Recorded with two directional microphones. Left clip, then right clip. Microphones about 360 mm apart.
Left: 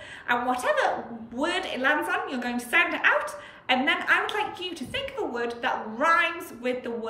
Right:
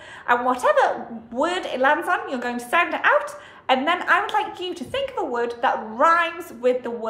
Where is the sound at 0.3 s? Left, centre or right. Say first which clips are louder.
Right 6 dB; centre.